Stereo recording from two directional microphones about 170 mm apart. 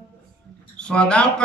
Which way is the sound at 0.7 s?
5° left (ahead or behind).